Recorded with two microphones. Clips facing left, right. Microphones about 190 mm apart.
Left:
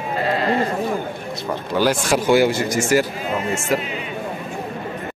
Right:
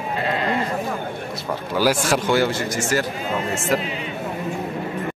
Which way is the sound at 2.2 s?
10° left (ahead or behind).